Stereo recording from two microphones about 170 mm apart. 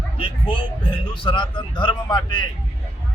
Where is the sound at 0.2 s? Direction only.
30° left (ahead or behind).